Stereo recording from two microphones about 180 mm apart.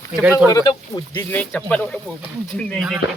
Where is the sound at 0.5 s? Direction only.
20° left (ahead or behind).